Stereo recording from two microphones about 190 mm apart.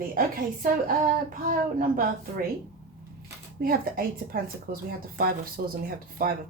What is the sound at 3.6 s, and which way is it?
A woman's voice, 50° right (ahead or behind).